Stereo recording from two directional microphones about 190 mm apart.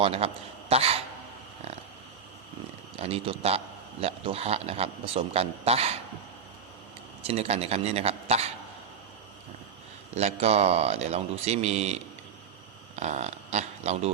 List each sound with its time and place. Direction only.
0.0 s a man's voice: 30° right (ahead or behind)
0.7 s a sound: 30° right (ahead or behind)
3.0 s a man's voice: 30° right (ahead or behind)
7.2 s a man's voice: 30° right (ahead or behind)
10.2 s a man's voice: 35° right (ahead or behind)
13.0 s speech: 35° right (ahead or behind)